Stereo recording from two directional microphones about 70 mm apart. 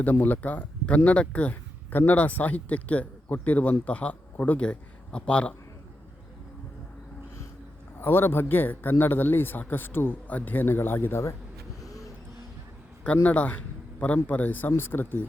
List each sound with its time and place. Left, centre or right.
0.0 s speech: left
8.0 s speech: left
11.8 s a sound: left
13.2 s speech: left